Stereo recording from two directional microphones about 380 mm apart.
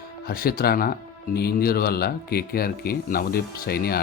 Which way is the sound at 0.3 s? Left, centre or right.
Left.